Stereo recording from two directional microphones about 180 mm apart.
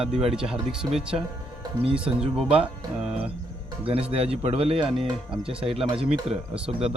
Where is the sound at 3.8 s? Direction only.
30° right (ahead or behind).